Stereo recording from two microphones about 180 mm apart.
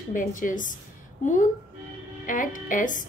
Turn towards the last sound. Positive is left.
turn(degrees=45)  # may be behind; listen again after turning